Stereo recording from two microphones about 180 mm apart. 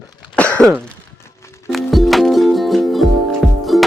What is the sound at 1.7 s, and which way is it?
Music, centre (ahead or behind).